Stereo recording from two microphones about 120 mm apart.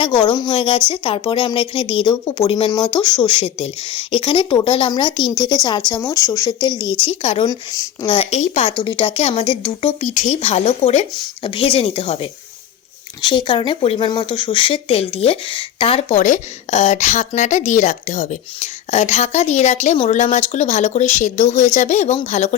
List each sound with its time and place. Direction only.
0.0 s speech: 40° left (ahead or behind)
0.5 s a woman's voice: 50° left (ahead or behind); by 6.7 s 30° left (ahead or behind)
7.0 s speech: 55° left (ahead or behind)
7.4 s speech: 30° left (ahead or behind)
8.0 s speech: 45° left (ahead or behind)
8.3 s a woman's voice: 70° left (ahead or behind)
8.8 s speech: 40° left (ahead or behind)
10.0 s speech: 80° left; by 11.0 s 60° left (ahead or behind)
11.1 s speech: 40° left (ahead or behind)
16.0 s a woman's voice: 80° left